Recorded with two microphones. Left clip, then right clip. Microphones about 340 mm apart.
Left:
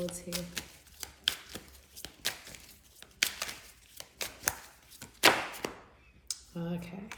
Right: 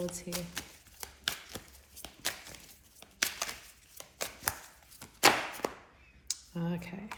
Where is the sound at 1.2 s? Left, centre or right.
Centre.